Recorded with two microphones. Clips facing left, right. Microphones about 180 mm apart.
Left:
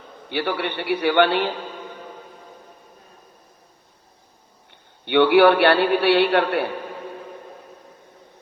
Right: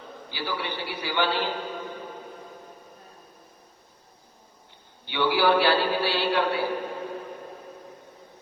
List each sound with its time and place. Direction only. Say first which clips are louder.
0.3 s a man's voice: left 8 dB; 65° left (ahead or behind)
5.0 s a man's voice: left 9 dB; 65° left (ahead or behind)